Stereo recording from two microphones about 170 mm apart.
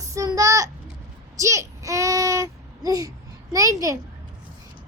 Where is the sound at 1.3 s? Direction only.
20° right (ahead or behind).